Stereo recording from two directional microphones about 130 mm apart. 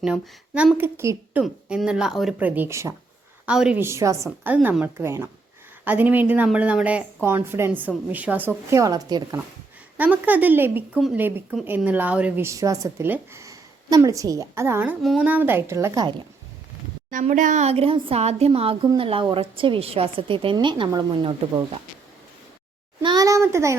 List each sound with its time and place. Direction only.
0.0 s speech: 10° right (ahead or behind)
2.5 s a child's voice: 15° right (ahead or behind)
3.4 s a woman's voice: 5° right (ahead or behind)
3.8 s a child's voice: 20° right (ahead or behind)
4.4 s speech: 10° right (ahead or behind); by 9.4 s 30° right (ahead or behind)
10.0 s speech: 10° right (ahead or behind)
12.5 s a child's voice: 25° right (ahead or behind)
15.0 s speech: centre (ahead or behind)
15.3 s speech: 15° right (ahead or behind)
17.1 s speech: 90° right; by 18.2 s 45° right (ahead or behind)
18.2 s a woman's voice: 55° right (ahead or behind); by 21.6 s 35° right (ahead or behind)
23.0 s a child's voice: 30° right (ahead or behind)